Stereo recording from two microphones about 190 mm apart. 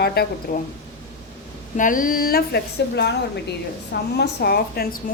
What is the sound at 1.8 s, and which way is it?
A woman's voice, 45° left (ahead or behind).